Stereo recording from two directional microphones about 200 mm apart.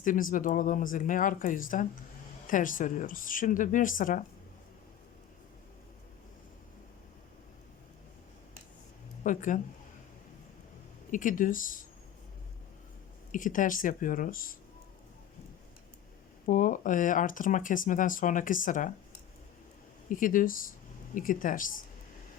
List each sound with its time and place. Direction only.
0.0 s speech: 40° left (ahead or behind)
9.2 s speech: 40° left (ahead or behind)
11.1 s speech: 40° left (ahead or behind)
13.3 s speech: 40° left (ahead or behind)
16.5 s speech: 40° left (ahead or behind)
20.1 s speech: 40° left (ahead or behind)